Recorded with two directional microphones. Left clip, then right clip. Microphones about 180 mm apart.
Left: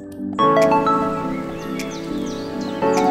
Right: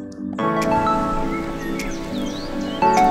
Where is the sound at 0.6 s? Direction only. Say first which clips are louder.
Left 3 dB; centre (ahead or behind).